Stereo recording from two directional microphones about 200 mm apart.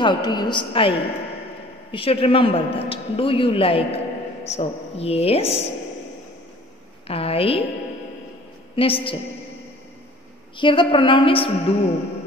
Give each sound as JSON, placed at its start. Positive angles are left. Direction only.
{"t": 0.0, "sound": "a man's voice", "side_deg": 20}
{"t": 7.1, "sound": "a woman's voice", "side_deg": 30}
{"t": 8.7, "sound": "a man's voice", "side_deg": 25}
{"t": 10.6, "sound": "a man's voice", "side_deg": 25}